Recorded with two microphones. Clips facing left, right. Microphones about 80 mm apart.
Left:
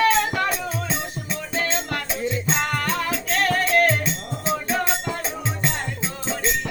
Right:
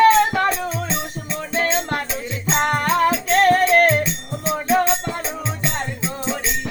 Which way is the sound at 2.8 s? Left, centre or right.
Right.